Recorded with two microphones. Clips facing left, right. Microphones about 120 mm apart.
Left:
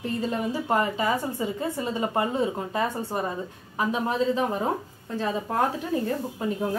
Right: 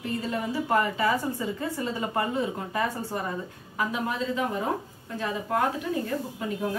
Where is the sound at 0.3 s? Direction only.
25° left (ahead or behind).